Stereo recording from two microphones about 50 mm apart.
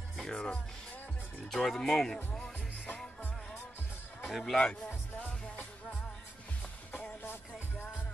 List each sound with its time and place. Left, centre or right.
0.2 s speech: centre
4.3 s a man's voice: centre
4.6 s speech: left
6.9 s music: left